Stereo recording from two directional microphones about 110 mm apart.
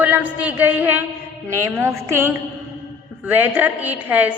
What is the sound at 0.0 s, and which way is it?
A woman's voice, 15° right (ahead or behind).